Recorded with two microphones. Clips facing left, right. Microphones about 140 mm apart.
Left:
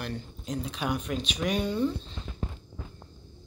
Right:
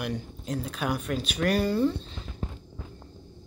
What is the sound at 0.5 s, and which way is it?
Speech, centre (ahead or behind).